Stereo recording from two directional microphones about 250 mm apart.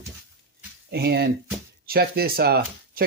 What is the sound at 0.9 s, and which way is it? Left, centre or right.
Speech, right.